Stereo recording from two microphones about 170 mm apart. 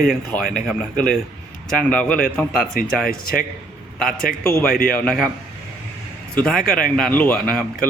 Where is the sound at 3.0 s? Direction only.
60° left (ahead or behind).